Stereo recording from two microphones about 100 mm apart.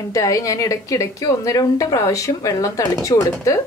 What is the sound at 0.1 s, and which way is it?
A woman's voice, 35° left (ahead or behind).